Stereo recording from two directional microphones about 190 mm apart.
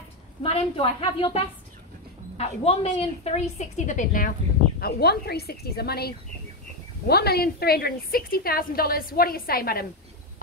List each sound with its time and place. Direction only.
0.4 s a woman's voice: 30° left (ahead or behind)
4.7 s a woman's voice: 55° left (ahead or behind)